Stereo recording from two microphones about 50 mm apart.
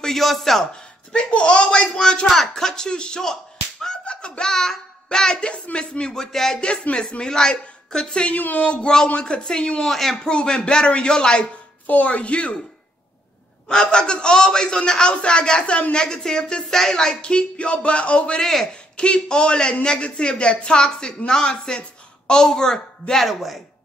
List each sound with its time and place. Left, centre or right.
0.0 s speech: centre
1.1 s a man's voice: centre
8.3 s a woman's voice: left
8.9 s a man's voice: centre
9.8 s speech: centre
10.1 s a man's voice: centre
11.9 s a woman's voice: left
13.7 s a man's voice: centre
18.4 s a man's voice: centre
18.9 s a woman's voice: left
23.2 s speech: centre